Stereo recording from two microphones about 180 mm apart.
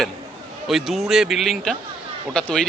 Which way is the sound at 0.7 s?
Centre (ahead or behind).